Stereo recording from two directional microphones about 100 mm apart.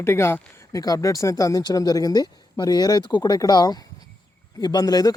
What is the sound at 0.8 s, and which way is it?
Speech, 35° left (ahead or behind).